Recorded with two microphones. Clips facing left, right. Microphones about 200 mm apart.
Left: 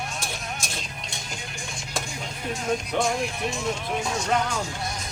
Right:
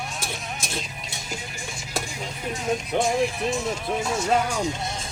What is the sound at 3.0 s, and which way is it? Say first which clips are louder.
Speech: right 3 dB; centre (ahead or behind).